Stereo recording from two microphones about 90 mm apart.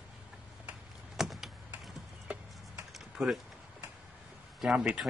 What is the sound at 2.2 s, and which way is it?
Clip-clop, 20° right (ahead or behind).